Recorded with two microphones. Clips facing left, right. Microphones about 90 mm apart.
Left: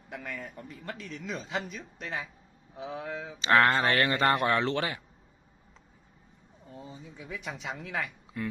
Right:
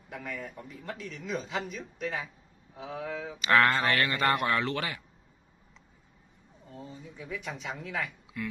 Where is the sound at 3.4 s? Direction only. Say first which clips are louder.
Left 1 dB; 25° left (ahead or behind).